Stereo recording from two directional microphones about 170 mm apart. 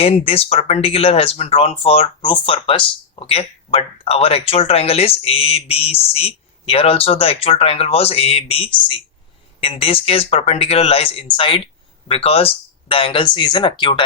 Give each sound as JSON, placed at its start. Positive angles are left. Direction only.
{"t": 0.0, "sound": "speech", "side_deg": 35}